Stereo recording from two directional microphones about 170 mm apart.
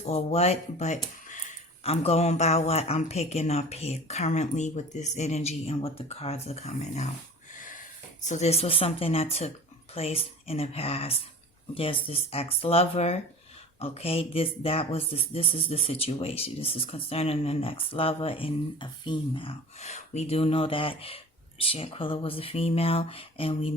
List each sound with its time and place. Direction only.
0.0 s speech: 40° left (ahead or behind)
8.2 s speech: 45° left (ahead or behind)